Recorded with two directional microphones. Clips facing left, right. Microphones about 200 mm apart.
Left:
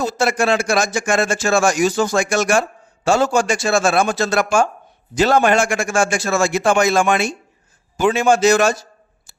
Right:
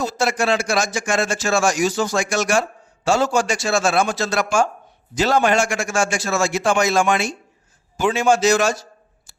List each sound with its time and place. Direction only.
0.0 s a man's voice: 55° left (ahead or behind)